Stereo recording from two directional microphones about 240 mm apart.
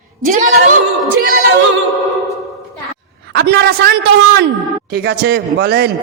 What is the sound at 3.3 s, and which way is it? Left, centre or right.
Speech, right.